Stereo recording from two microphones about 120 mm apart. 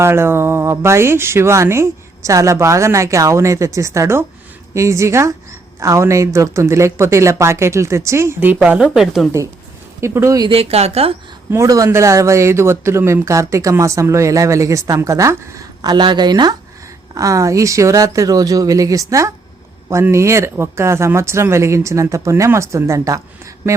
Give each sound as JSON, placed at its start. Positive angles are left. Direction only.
{"t": 0.0, "sound": "speech", "side_deg": -20}
{"t": 10.0, "sound": "speech", "side_deg": -25}
{"t": 10.5, "sound": "speech", "side_deg": -55}
{"t": 11.5, "sound": "speech", "side_deg": -30}